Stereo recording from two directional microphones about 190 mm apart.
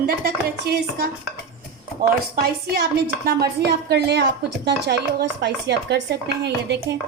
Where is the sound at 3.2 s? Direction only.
55° right (ahead or behind).